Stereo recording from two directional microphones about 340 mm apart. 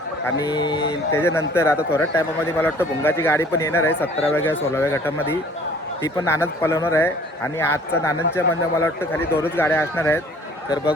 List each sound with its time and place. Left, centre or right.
0.3 s speech: centre